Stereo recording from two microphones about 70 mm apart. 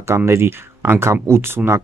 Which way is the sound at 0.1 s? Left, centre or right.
Right.